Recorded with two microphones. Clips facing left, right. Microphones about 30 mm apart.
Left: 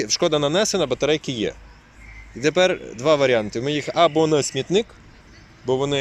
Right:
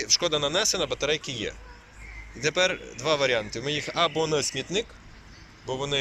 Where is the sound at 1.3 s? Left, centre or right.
Left.